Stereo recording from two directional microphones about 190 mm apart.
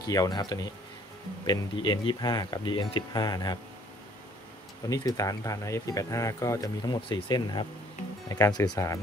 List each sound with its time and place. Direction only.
0.0 s speech: 20° left (ahead or behind)
4.8 s speech: 20° left (ahead or behind)